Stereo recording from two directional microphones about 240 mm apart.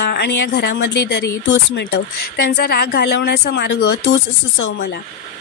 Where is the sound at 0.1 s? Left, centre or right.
Left.